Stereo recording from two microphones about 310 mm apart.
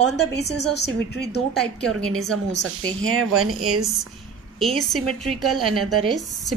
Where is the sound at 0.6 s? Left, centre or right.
Left.